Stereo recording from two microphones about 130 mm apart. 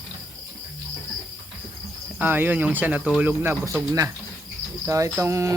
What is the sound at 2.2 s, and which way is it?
Speech, 15° right (ahead or behind).